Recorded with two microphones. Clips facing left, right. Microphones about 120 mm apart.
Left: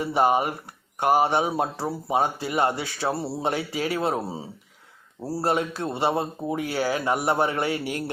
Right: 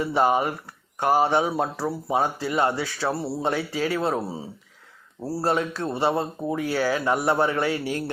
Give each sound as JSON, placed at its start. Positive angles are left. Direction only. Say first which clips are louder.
{"t": 0.0, "sound": "speech", "louder": "even", "side_deg": 15}